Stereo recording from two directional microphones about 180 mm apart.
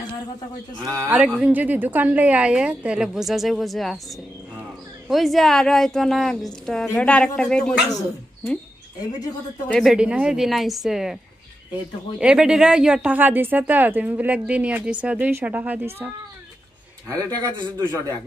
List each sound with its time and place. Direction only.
1.0 s speech: 5° right (ahead or behind)
5.0 s speech: centre (ahead or behind)
9.7 s speech: centre (ahead or behind)
12.2 s speech: 5° right (ahead or behind)
17.1 s speech: 20° right (ahead or behind)